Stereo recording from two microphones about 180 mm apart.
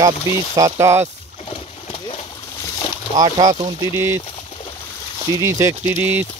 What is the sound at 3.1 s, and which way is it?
Speech, 25° right (ahead or behind).